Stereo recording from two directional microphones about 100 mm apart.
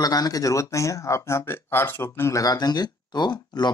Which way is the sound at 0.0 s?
40° left (ahead or behind).